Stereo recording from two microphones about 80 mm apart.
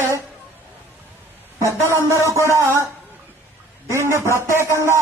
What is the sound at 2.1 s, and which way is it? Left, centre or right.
Speech, right.